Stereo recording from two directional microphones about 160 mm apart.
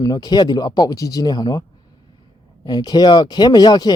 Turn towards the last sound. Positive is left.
turn(degrees=25)  # may be behind; listen again after turning